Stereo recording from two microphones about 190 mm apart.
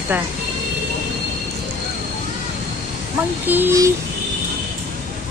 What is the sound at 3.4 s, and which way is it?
Speech, 10° right (ahead or behind).